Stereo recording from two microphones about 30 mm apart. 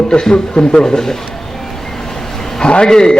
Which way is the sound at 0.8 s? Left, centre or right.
Centre.